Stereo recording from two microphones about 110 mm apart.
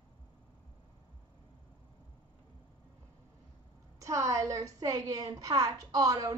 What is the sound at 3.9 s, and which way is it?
A woman's voice, 30° right (ahead or behind).